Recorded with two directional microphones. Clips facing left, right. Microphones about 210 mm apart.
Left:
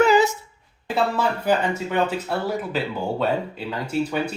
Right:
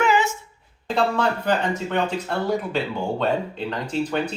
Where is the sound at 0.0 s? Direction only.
35° left (ahead or behind).